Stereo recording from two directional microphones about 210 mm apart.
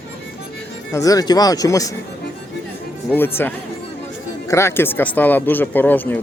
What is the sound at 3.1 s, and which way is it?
Speech, 10° left (ahead or behind).